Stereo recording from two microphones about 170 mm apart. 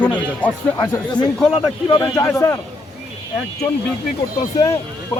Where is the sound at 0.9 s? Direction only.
25° left (ahead or behind).